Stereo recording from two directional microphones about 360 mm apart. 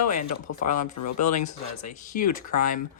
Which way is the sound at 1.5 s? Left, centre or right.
Left.